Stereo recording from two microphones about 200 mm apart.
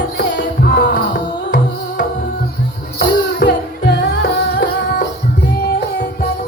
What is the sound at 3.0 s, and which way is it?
Music, 60° left (ahead or behind).